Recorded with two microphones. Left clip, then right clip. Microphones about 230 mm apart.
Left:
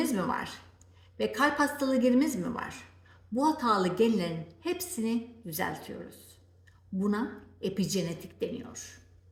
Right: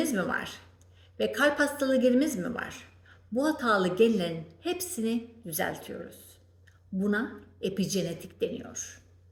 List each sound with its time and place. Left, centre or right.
0.0 s a woman's voice: centre